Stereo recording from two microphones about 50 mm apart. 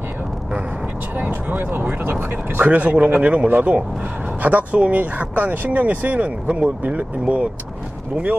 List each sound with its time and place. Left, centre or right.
1.2 s speech: right
2.7 s speech: right